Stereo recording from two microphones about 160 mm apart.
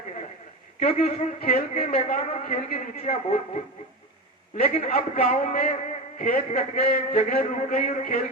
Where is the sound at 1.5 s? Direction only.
40° left (ahead or behind).